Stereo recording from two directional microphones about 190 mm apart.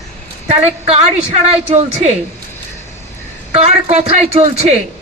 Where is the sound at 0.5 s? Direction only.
35° right (ahead or behind).